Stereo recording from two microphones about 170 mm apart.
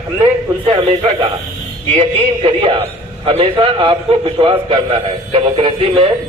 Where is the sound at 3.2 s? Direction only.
30° right (ahead or behind).